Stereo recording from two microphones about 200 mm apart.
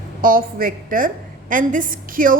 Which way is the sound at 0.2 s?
45° right (ahead or behind).